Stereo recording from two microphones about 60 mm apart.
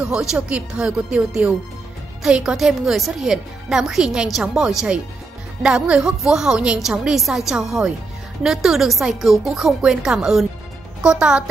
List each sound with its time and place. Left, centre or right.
0.0 s a woman's voice: centre